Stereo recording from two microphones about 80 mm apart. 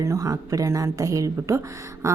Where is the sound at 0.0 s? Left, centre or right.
Right.